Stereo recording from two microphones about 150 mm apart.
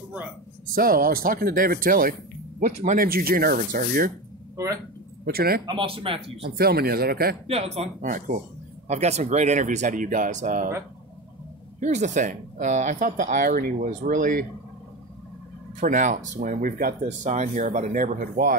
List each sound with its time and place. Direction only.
0.7 s speech: 75° right (ahead or behind)
2.8 s speech: 55° right (ahead or behind)
3.1 s speech: 80° right
5.2 s speech: 90° right
5.7 s speech: 35° right (ahead or behind)
6.4 s speech: 90° right
7.4 s speech: 45° right (ahead or behind); by 10.7 s 60° right (ahead or behind)
11.8 s speech: 50° right (ahead or behind)
15.8 s speech: 60° right (ahead or behind); by 18.6 s 75° right (ahead or behind)